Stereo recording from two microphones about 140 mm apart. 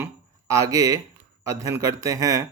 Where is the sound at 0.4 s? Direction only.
25° right (ahead or behind).